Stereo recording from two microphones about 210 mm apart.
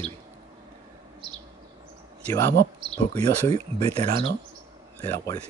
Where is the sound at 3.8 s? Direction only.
30° right (ahead or behind).